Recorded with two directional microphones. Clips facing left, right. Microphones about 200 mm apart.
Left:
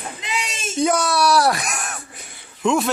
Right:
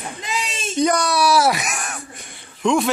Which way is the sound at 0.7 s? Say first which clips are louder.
Right 1 dB; 5° left (ahead or behind).